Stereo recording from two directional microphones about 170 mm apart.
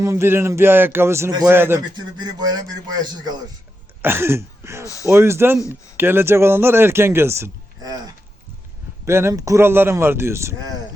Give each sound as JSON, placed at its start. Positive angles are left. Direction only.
{"t": 0.0, "sound": "speech", "side_deg": -15}
{"t": 2.1, "sound": "a man's voice", "side_deg": -25}
{"t": 4.0, "sound": "speech", "side_deg": -15}